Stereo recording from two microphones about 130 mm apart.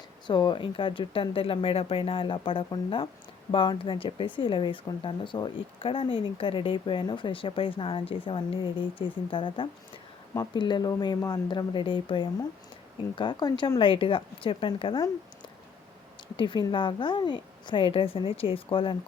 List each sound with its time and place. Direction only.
0.3 s speech: 35° left (ahead or behind)
16.4 s speech: 40° left (ahead or behind)